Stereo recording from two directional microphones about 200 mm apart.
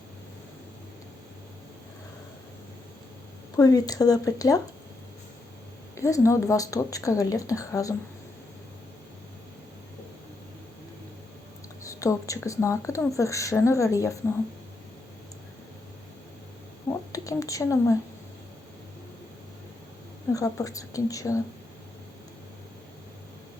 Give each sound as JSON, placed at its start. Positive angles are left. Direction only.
{"t": 3.5, "sound": "speech", "side_deg": 20}
{"t": 6.0, "sound": "speech", "side_deg": 15}
{"t": 11.8, "sound": "speech", "side_deg": 15}
{"t": 16.9, "sound": "a sound", "side_deg": 15}
{"t": 20.3, "sound": "speech", "side_deg": 15}